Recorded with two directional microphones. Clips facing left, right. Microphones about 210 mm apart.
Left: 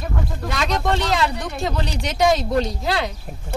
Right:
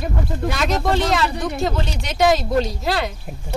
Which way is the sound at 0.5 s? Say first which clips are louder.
Right 1 dB; centre (ahead or behind).